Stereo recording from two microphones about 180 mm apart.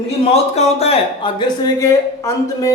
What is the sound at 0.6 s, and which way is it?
Speech, 35° left (ahead or behind).